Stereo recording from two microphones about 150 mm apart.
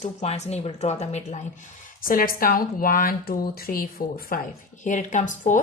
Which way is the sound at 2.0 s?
70° left (ahead or behind).